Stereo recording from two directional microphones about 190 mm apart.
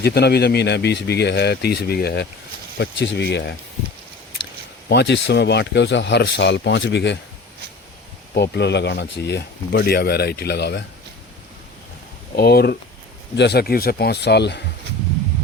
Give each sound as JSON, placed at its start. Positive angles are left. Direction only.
{"t": 0.0, "sound": "speech", "side_deg": 60}
{"t": 4.9, "sound": "speech", "side_deg": 65}
{"t": 8.4, "sound": "speech", "side_deg": 65}
{"t": 12.4, "sound": "speech", "side_deg": 60}